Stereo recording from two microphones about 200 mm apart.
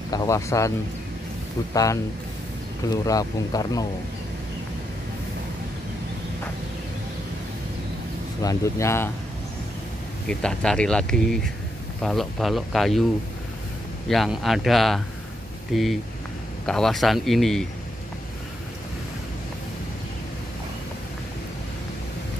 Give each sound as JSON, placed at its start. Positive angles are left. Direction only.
{"t": 0.1, "sound": "speech", "side_deg": 15}
{"t": 8.4, "sound": "speech", "side_deg": 15}
{"t": 10.2, "sound": "speech", "side_deg": 5}
{"t": 14.0, "sound": "speech", "side_deg": 0}